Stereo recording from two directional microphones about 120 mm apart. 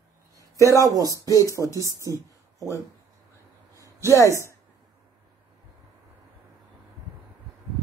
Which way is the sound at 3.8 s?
25° left (ahead or behind).